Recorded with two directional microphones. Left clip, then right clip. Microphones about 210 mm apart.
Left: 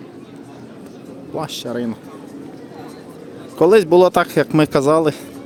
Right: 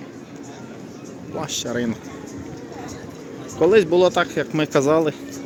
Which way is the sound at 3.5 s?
30° left (ahead or behind).